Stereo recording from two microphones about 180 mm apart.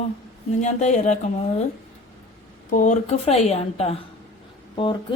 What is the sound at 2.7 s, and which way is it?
A woman's voice, 45° left (ahead or behind).